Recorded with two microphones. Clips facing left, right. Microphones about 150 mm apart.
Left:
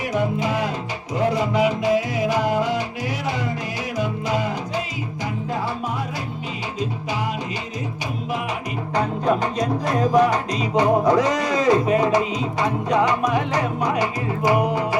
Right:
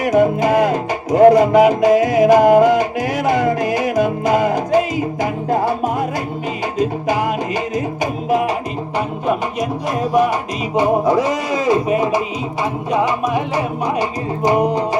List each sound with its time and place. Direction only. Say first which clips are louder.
0.0 s music: right 9 dB; 50° right (ahead or behind)
9.0 s music: right 1 dB; 10° right (ahead or behind)
10.8 s speech: right 2 dB; 10° right (ahead or behind)
12.9 s music: right 2 dB; 20° right (ahead or behind)